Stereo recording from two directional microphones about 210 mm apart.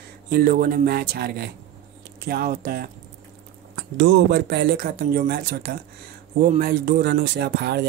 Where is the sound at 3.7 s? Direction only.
60° right (ahead or behind).